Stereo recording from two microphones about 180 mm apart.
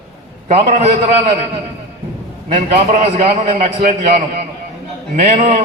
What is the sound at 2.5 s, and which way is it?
A man's voice, 35° right (ahead or behind).